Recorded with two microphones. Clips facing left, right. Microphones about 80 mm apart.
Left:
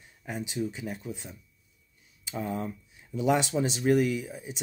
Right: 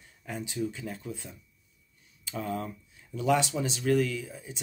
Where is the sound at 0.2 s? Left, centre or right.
Centre.